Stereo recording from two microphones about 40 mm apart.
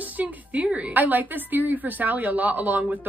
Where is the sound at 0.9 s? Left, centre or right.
Right.